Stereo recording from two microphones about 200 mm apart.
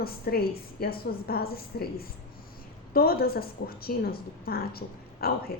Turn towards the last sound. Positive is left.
turn(degrees=50)  # may be behind; listen again after turning